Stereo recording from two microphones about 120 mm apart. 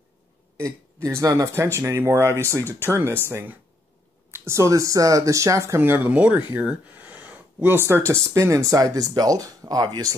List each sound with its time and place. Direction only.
0.9 s speech: 20° right (ahead or behind)